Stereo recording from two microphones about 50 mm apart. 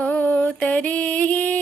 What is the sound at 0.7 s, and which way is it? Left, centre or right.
Music, left.